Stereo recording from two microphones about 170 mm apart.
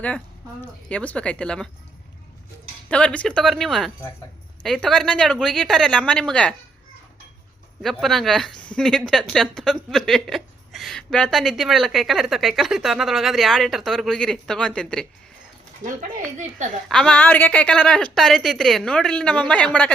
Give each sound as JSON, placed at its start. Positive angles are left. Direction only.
{"t": 0.6, "sound": "speech", "side_deg": 5}
{"t": 2.9, "sound": "speech", "side_deg": 5}
{"t": 7.8, "sound": "speech", "side_deg": 0}
{"t": 15.8, "sound": "speech", "side_deg": -50}
{"t": 16.9, "sound": "speech", "side_deg": 5}